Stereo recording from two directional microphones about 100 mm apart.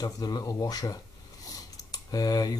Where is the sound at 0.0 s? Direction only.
40° left (ahead or behind).